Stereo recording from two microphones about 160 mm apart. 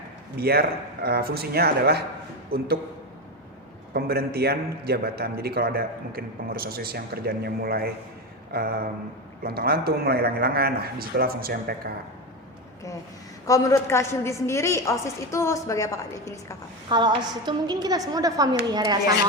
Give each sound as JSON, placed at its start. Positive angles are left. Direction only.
{"t": 0.3, "sound": "speech", "side_deg": -80}
{"t": 2.5, "sound": "a man's voice", "side_deg": -75}
{"t": 3.9, "sound": "a man's voice", "side_deg": -75}
{"t": 13.5, "sound": "a woman's voice", "side_deg": 20}
{"t": 16.9, "sound": "a woman's voice", "side_deg": -30}